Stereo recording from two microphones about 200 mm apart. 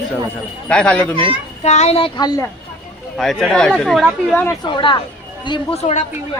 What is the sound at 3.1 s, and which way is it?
Speech, centre (ahead or behind).